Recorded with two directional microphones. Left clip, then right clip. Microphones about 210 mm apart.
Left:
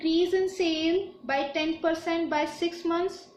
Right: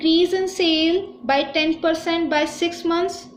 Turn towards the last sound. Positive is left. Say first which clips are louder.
# right 7 dB
turn(degrees=-45)  # may be behind; listen again after turning